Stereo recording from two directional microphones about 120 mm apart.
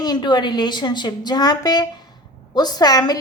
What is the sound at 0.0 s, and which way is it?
A woman's voice, 35° left (ahead or behind).